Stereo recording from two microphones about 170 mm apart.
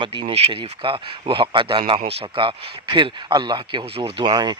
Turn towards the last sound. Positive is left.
turn(degrees=-25)  # may be behind; listen again after turning